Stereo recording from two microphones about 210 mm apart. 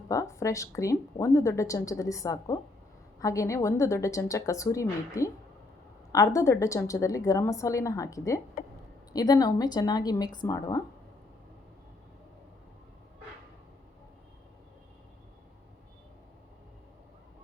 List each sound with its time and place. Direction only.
0.1 s a woman's voice: 15° left (ahead or behind)